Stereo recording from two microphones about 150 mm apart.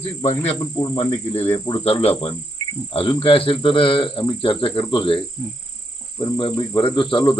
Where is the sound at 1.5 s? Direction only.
25° left (ahead or behind).